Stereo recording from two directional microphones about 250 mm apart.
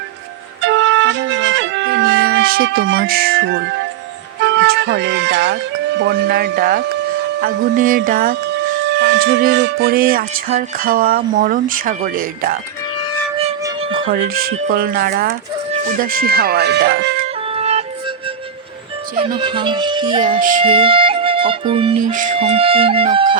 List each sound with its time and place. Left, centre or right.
0.6 s music: right
4.5 s speech: right
6.0 s music: right
14.1 s music: right
17.5 s music: right
19.1 s speech: right
20.4 s music: right
20.7 s music: right
21.9 s speech: right